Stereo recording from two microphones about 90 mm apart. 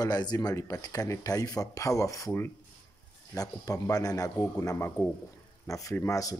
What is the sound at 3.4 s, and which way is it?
A man's voice, 40° left (ahead or behind).